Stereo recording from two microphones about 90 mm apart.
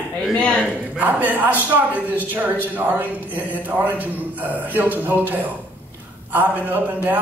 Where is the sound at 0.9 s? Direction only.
20° right (ahead or behind).